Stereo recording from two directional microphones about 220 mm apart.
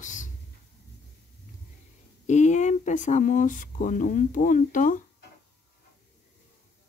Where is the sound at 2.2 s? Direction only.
30° left (ahead or behind).